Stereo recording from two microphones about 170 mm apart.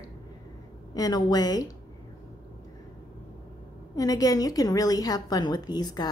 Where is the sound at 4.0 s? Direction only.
20° left (ahead or behind).